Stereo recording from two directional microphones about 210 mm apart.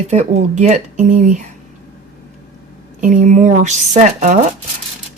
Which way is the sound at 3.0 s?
35° right (ahead or behind).